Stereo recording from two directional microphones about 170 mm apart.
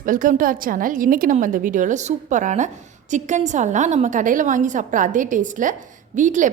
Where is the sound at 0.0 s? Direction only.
50° right (ahead or behind).